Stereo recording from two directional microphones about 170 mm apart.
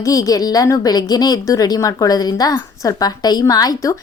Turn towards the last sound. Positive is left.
turn(degrees=20)  # may be behind; listen again after turning